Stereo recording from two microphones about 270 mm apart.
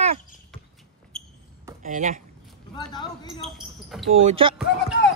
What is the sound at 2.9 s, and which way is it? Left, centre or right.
Speech, centre.